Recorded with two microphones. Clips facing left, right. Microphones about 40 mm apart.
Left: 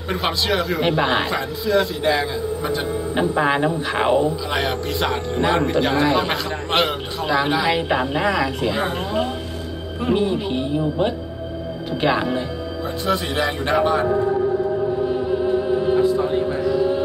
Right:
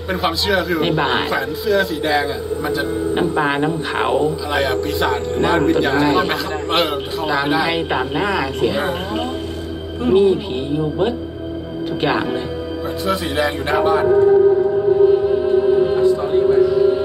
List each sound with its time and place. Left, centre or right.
0.1 s a man's voice: centre
7.6 s speech: centre
8.0 s a man's voice: centre
15.0 s music: centre
16.0 s a sound: centre